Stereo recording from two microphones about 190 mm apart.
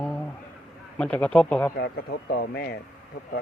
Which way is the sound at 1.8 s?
55° left (ahead or behind).